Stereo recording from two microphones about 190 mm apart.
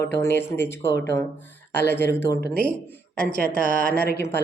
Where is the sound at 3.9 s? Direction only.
55° left (ahead or behind).